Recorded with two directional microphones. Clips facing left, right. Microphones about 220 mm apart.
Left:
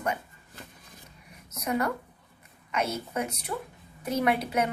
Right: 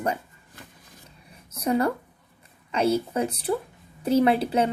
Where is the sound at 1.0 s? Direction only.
30° right (ahead or behind).